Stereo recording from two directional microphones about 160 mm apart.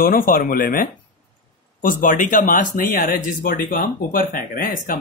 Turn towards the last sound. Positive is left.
turn(degrees=60)  # may be behind; listen again after turning